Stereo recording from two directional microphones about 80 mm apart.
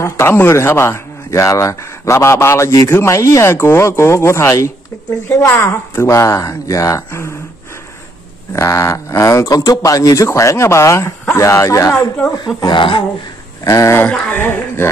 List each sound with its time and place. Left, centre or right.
0.0 s speech: left
8.5 s speech: left
12.6 s speech: left
13.7 s speech: left
14.0 s speech: left